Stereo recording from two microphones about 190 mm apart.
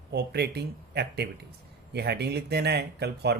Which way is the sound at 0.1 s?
60° right (ahead or behind).